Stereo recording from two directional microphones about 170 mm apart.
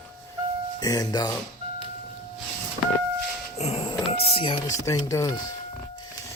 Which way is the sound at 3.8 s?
30° left (ahead or behind).